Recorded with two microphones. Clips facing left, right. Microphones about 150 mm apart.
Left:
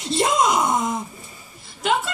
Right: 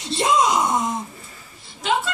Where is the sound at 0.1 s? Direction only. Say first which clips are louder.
Even; 50° left (ahead or behind).